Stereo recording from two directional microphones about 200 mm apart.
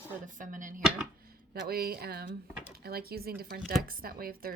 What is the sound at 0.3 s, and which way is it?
Speech, 40° right (ahead or behind).